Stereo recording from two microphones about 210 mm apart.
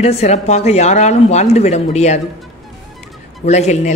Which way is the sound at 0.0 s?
30° left (ahead or behind).